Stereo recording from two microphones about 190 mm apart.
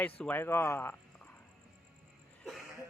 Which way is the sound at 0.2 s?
10° left (ahead or behind).